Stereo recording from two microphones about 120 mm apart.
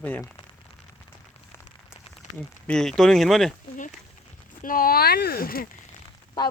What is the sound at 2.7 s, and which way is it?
Speech, 5° left (ahead or behind).